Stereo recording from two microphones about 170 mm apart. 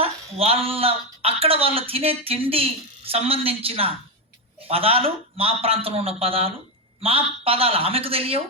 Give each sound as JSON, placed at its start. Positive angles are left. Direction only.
{"t": 0.0, "sound": "speech", "side_deg": -35}